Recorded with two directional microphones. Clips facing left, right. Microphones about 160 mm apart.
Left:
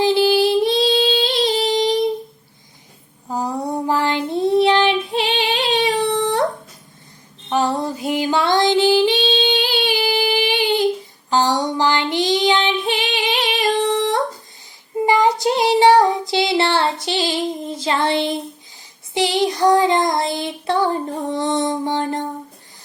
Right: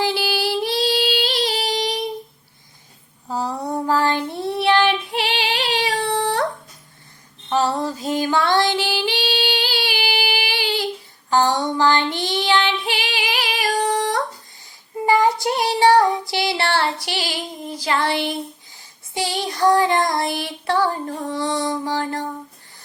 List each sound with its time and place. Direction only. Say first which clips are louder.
0.0 s female singing: left 7 dB; 20° left (ahead or behind)
3.2 s child singing: left 2 dB; 15° left (ahead or behind)
7.5 s music: left 1 dB; 15° left (ahead or behind)
11.3 s child singing: even; 20° left (ahead or behind)